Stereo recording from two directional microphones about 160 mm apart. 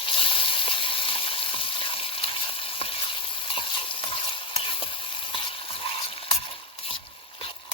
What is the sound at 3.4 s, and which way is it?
Stir, 35° left (ahead or behind).